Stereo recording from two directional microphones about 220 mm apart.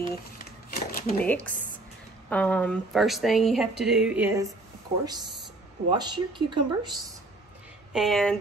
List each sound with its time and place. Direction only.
0.7 s a sound: 45° left (ahead or behind)
1.2 s speech: 5° left (ahead or behind); by 7.1 s 20° right (ahead or behind)
7.9 s speech: centre (ahead or behind)